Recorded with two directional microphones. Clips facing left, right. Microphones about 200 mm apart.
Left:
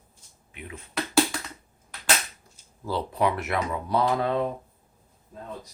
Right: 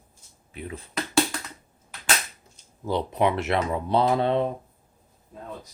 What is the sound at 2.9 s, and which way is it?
Speech, 20° right (ahead or behind).